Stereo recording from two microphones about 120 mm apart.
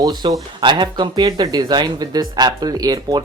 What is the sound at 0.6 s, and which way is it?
Speech, 40° right (ahead or behind).